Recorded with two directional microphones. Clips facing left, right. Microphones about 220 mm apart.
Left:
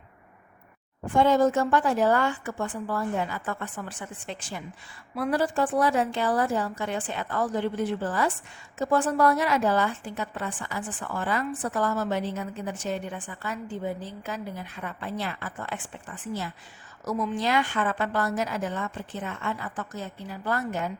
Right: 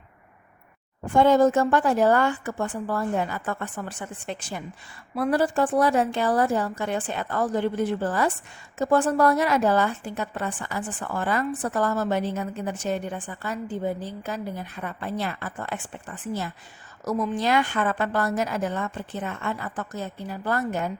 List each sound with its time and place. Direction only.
1.1 s a woman's voice: 45° right (ahead or behind)